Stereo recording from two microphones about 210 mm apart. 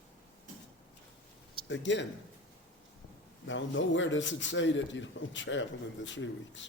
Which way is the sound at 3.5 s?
60° left (ahead or behind).